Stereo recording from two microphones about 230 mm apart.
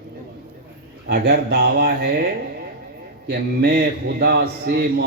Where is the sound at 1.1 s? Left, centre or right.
Right.